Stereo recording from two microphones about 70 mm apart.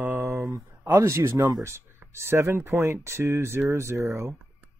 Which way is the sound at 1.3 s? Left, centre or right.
Right.